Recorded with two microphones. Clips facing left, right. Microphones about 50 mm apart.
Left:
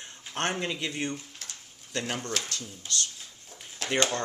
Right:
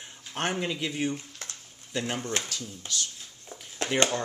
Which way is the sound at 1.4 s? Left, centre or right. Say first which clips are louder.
Right 2 dB; right.